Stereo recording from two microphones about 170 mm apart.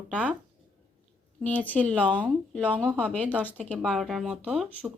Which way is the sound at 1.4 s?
10° left (ahead or behind).